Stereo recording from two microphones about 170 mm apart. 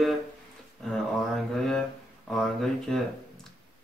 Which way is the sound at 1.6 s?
5° left (ahead or behind).